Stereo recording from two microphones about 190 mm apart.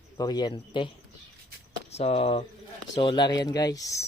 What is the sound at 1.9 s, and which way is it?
Speech, 35° left (ahead or behind).